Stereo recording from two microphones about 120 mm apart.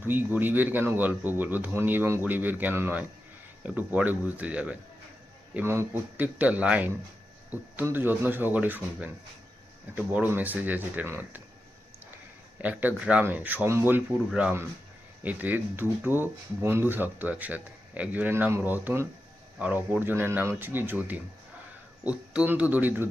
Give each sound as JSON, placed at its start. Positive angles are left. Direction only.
{"t": 0.0, "sound": "speech", "side_deg": -15}
{"t": 12.5, "sound": "speech", "side_deg": -15}
{"t": 14.3, "sound": "speech", "side_deg": -5}